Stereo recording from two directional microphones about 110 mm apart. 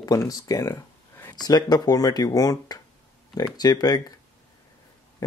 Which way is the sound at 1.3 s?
40° left (ahead or behind).